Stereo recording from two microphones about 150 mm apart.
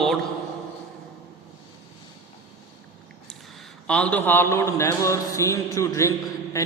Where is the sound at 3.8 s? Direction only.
10° left (ahead or behind).